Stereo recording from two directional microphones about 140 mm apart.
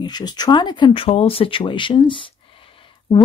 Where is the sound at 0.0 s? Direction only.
30° left (ahead or behind).